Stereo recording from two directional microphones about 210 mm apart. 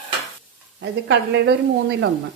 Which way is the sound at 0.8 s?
55° right (ahead or behind).